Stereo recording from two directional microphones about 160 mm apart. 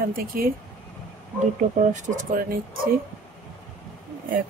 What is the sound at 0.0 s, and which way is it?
Speech, 65° right (ahead or behind).